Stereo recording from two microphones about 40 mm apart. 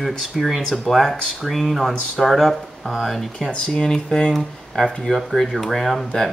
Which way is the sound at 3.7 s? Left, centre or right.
Centre.